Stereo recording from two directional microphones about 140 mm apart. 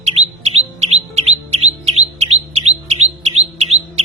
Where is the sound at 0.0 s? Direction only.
50° right (ahead or behind).